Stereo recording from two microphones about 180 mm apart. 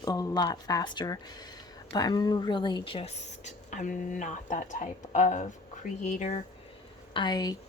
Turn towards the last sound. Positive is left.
turn(degrees=20)  # may be behind; listen again after turning